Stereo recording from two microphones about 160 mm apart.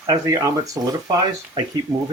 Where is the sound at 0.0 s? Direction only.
20° right (ahead or behind).